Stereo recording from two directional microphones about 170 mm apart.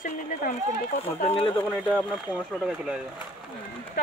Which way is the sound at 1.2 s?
35° left (ahead or behind).